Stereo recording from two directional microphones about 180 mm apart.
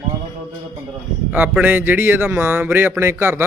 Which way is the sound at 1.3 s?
5° right (ahead or behind).